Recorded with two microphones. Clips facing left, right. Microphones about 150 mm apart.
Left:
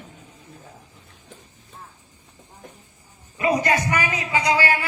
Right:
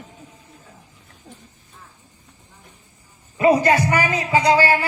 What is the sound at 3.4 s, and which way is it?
A man's voice, 30° right (ahead or behind).